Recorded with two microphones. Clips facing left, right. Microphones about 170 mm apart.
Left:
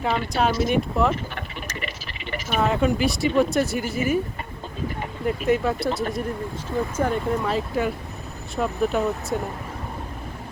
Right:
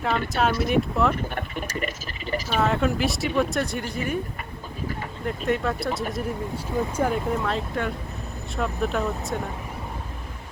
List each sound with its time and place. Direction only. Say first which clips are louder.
0.0 s speech: left 1 dB; centre (ahead or behind)
1.1 s a sound: right 1 dB; 45° right (ahead or behind)
2.5 s speech: left 2 dB; centre (ahead or behind)
5.2 s speech: left 4 dB; centre (ahead or behind)